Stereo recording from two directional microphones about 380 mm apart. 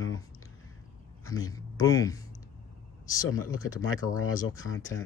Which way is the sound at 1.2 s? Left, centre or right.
Centre.